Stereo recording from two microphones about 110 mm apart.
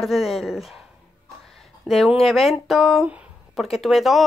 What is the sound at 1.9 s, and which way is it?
Speech, centre (ahead or behind).